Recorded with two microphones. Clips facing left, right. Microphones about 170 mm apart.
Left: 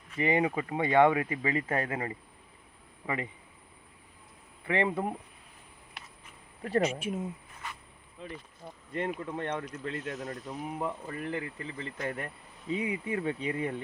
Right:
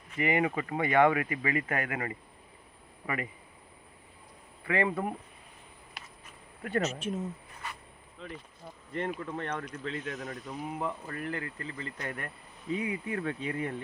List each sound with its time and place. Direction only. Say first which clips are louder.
0.2 s speech: left 1 dB; 25° left (ahead or behind)
4.6 s speech: even; 20° left (ahead or behind)
6.6 s speech: left 3 dB; 30° left (ahead or behind)
6.8 s speech: left 2 dB; 10° left (ahead or behind)
9.0 s speech: left 1 dB; 15° left (ahead or behind)
10.0 s speech: left 1 dB; centre (ahead or behind); by 13.8 s 20° left (ahead or behind)